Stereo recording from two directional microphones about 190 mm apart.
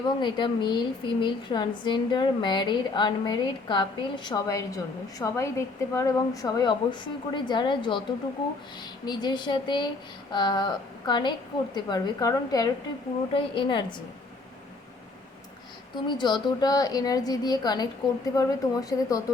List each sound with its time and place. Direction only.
0.0 s a woman's voice: 25° left (ahead or behind)
9.0 s a woman's voice: 20° left (ahead or behind)
16.0 s a woman's voice: 25° left (ahead or behind)